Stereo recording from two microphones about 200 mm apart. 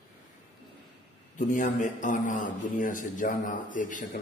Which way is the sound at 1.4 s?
40° left (ahead or behind).